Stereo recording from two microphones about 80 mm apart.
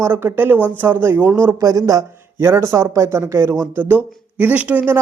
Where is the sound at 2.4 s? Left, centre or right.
Right.